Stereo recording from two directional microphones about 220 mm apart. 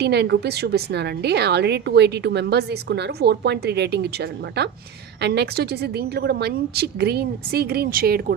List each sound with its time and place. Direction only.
0.0 s a woman's voice: 50° right (ahead or behind)